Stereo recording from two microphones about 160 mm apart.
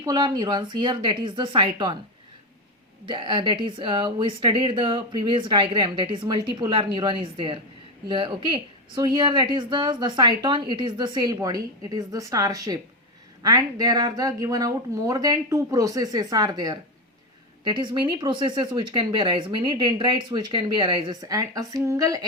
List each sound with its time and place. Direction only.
0.0 s speech: 25° right (ahead or behind)
3.1 s speech: 30° right (ahead or behind)